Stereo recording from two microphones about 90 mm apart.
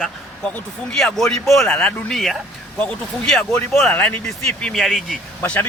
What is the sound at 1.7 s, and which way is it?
Speech, 15° left (ahead or behind).